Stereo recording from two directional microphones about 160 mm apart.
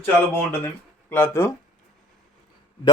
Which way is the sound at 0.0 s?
15° left (ahead or behind).